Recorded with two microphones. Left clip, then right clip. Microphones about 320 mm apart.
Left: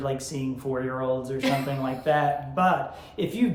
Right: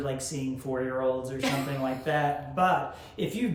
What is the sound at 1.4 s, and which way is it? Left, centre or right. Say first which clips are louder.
Speech: left 4 dB; centre.